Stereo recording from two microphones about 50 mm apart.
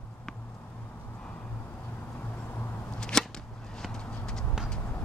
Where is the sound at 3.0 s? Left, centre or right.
Centre.